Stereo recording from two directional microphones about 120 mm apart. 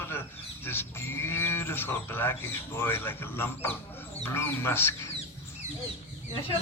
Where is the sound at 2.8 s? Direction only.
20° left (ahead or behind).